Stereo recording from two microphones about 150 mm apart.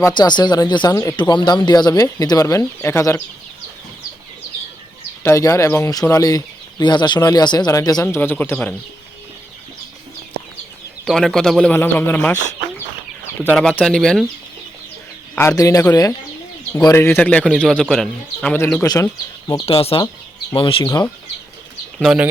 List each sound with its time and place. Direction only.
0.1 s speech: 30° left (ahead or behind)
5.2 s speech: 20° left (ahead or behind)
11.0 s speech: centre (ahead or behind)
13.4 s speech: 5° left (ahead or behind)
15.4 s speech: 20° left (ahead or behind)
18.5 s speech: 15° left (ahead or behind)
19.6 s speech: 40° left (ahead or behind)
21.9 s speech: centre (ahead or behind)